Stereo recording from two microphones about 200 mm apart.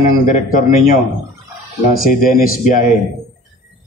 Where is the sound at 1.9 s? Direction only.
45° left (ahead or behind).